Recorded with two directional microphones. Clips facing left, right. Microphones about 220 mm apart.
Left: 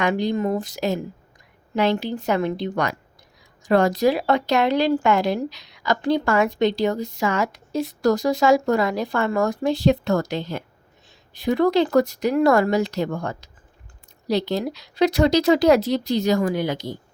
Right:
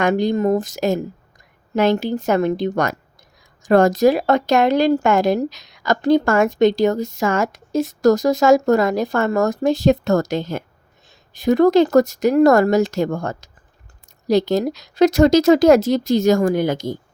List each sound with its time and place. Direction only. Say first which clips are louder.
0.0 s a woman's voice: right 4 dB; 45° right (ahead or behind)